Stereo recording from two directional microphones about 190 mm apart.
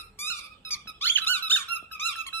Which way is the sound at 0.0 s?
10° left (ahead or behind).